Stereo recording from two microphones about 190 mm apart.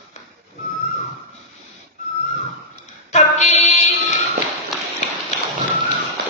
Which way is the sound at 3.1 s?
35° left (ahead or behind).